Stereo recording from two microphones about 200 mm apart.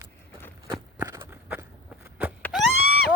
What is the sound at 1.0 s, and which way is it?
Walk, 20° right (ahead or behind).